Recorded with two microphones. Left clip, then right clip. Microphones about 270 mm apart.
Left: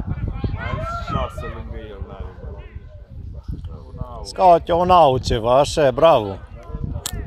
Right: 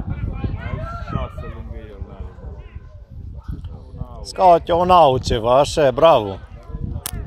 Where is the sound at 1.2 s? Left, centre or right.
Left.